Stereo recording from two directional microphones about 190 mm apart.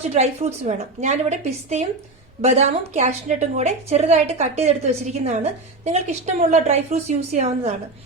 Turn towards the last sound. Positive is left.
turn(degrees=-35)  # may be behind; listen again after turning